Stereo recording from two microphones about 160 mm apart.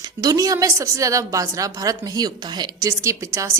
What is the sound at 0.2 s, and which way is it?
A woman's voice, 20° right (ahead or behind).